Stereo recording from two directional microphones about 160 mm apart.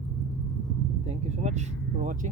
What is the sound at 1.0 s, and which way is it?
Speech, 45° right (ahead or behind).